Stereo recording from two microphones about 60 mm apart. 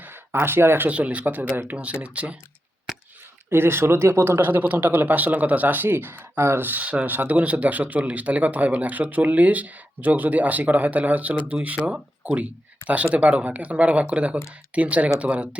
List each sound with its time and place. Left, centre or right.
0.0 s a sound: right
0.9 s speech: right
3.5 s speech: right
4.4 s speech: right
6.7 s speech: right